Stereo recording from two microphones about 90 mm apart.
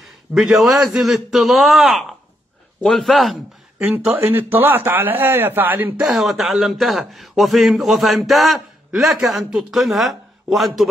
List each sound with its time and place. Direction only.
0.3 s speech: 5° right (ahead or behind)
3.8 s speech: 15° right (ahead or behind)
4.2 s a man's voice: 25° right (ahead or behind)
5.9 s speech: 5° right (ahead or behind)